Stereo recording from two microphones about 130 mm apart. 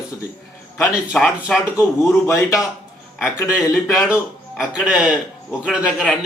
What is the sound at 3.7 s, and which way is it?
A man's voice, 5° right (ahead or behind).